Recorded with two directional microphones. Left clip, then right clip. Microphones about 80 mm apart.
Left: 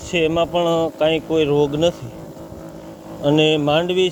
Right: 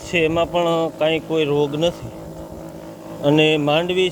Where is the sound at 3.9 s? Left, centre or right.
Left.